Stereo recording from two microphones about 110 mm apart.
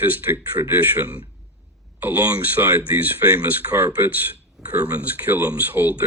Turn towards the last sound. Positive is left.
turn(degrees=-15)  # may be behind; listen again after turning